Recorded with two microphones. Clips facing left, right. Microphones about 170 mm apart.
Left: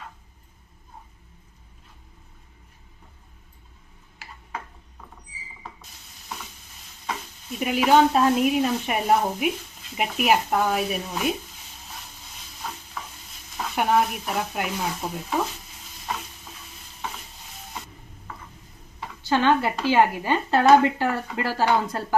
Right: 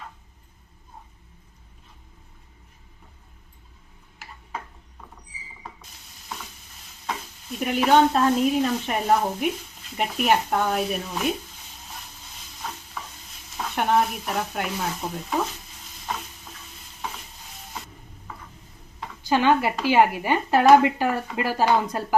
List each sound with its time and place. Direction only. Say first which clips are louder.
7.1 s speech: even; centre (ahead or behind)
13.0 s stir: even; centre (ahead or behind)
13.6 s speech: even; centre (ahead or behind)
16.1 s stir: even; centre (ahead or behind)
19.2 s speech: right 1 dB; 15° right (ahead or behind)